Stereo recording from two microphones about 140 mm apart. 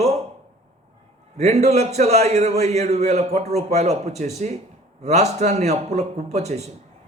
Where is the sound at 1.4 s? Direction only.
50° right (ahead or behind).